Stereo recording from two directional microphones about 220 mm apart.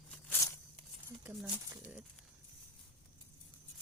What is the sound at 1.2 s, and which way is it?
Speech, 5° right (ahead or behind).